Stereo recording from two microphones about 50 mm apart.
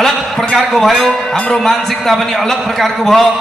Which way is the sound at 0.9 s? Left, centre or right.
Centre.